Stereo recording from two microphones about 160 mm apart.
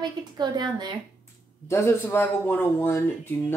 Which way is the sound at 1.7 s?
15° left (ahead or behind).